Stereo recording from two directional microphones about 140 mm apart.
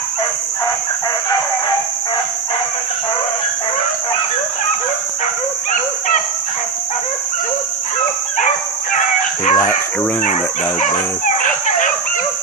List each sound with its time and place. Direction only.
8.9 s chicken: 60° left (ahead or behind)
10.2 s speech: 65° left (ahead or behind)